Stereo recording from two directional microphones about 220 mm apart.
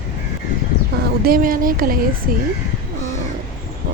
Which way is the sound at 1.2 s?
40° right (ahead or behind).